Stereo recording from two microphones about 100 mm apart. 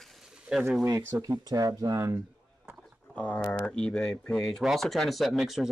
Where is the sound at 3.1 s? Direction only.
10° left (ahead or behind).